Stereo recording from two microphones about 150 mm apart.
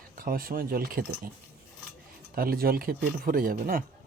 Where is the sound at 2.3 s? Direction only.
80° right.